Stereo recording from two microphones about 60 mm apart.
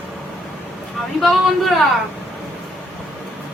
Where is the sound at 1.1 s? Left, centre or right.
Centre.